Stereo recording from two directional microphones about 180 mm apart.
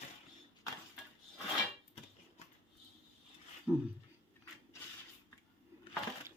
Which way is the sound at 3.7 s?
Centre (ahead or behind).